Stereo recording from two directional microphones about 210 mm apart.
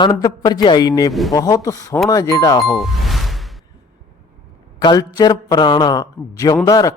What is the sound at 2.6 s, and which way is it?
Music, centre (ahead or behind).